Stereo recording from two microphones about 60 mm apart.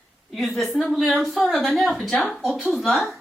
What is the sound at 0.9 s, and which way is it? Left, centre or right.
Speech, centre.